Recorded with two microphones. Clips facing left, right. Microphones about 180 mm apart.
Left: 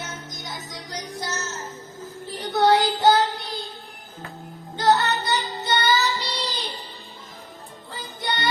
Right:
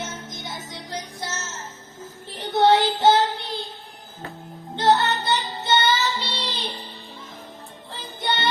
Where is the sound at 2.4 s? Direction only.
25° right (ahead or behind).